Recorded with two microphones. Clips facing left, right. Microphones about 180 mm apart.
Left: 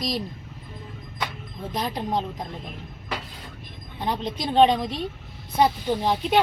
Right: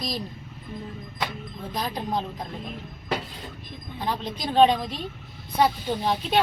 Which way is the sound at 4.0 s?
20° left (ahead or behind).